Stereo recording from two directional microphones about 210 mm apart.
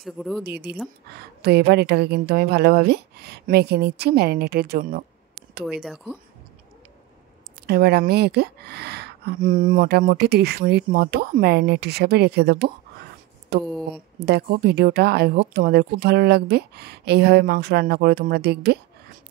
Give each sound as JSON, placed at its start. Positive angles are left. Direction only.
{"t": 0.0, "sound": "speech", "side_deg": 0}
{"t": 0.4, "sound": "speech", "side_deg": -50}
{"t": 5.7, "sound": "speech", "side_deg": 0}
{"t": 7.6, "sound": "speech", "side_deg": -50}
{"t": 13.7, "sound": "speech", "side_deg": 0}
{"t": 14.2, "sound": "speech", "side_deg": -50}